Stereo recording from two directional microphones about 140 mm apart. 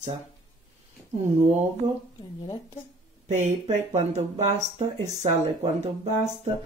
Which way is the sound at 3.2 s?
55° right (ahead or behind).